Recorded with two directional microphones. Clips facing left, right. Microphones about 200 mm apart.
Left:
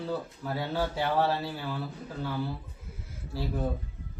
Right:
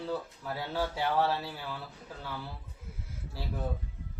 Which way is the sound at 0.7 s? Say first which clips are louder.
Left 1 dB; 25° left (ahead or behind).